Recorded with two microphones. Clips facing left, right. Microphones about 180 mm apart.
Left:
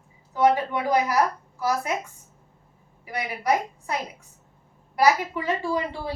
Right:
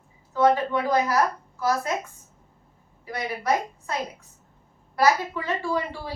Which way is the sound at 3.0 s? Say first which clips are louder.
Left 1 dB; 15° left (ahead or behind).